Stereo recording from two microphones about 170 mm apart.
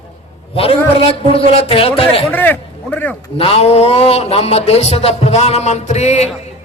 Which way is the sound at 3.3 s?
35° left (ahead or behind).